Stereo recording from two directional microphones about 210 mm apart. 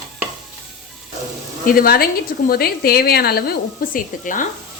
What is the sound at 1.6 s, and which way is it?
Stir, 45° left (ahead or behind).